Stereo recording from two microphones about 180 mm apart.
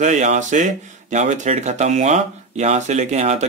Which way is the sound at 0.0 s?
40° right (ahead or behind).